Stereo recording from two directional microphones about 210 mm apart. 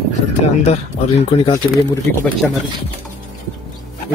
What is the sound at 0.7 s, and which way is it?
Speech, 30° left (ahead or behind).